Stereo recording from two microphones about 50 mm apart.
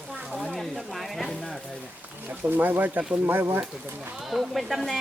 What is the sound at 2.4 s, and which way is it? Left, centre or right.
Speech, right.